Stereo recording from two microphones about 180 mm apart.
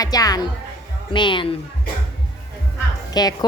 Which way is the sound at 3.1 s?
20° left (ahead or behind).